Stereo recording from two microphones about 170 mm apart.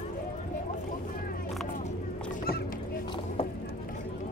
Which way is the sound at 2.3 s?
55° left (ahead or behind).